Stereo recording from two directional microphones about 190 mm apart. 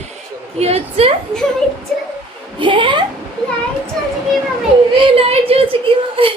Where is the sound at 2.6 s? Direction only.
25° right (ahead or behind).